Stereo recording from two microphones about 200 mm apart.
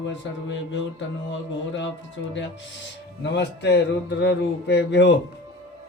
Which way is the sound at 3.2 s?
60° left (ahead or behind).